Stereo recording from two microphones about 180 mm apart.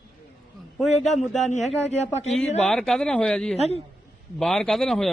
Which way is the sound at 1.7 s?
40° left (ahead or behind).